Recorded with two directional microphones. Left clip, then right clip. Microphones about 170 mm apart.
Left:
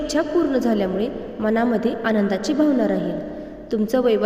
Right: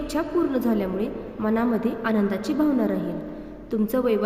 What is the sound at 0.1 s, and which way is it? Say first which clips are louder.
A woman's voice: left 4 dB; 15° left (ahead or behind).